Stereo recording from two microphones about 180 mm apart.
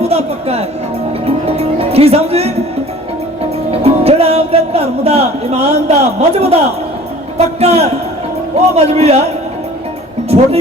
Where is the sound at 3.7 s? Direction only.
35° right (ahead or behind).